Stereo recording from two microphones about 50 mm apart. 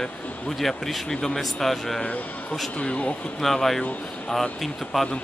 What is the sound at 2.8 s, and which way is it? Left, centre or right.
Speech, left.